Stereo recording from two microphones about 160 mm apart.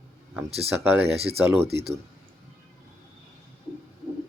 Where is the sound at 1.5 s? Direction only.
15° right (ahead or behind).